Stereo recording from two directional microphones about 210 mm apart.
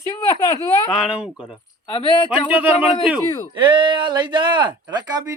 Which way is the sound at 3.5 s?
20° right (ahead or behind).